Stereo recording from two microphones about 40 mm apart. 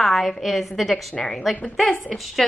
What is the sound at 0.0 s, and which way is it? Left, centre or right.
A woman's voice, centre.